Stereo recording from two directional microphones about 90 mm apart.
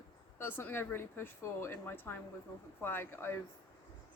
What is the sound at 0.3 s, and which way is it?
Speech, 25° left (ahead or behind).